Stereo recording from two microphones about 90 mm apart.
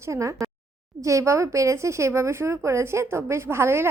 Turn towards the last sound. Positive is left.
turn(degrees=-30)  # may be behind; listen again after turning